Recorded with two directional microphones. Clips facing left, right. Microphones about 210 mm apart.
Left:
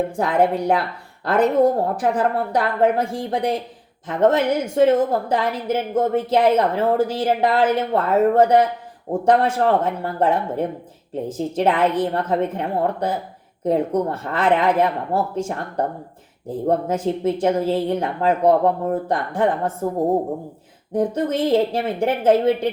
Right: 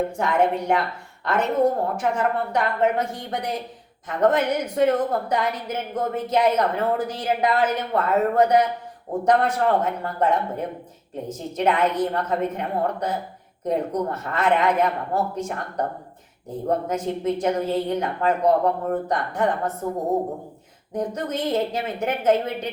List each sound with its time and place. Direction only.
0.2 s a woman's voice: 35° left (ahead or behind)
20.9 s a woman's voice: 30° left (ahead or behind)